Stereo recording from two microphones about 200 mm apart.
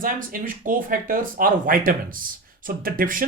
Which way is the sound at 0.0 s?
45° right (ahead or behind).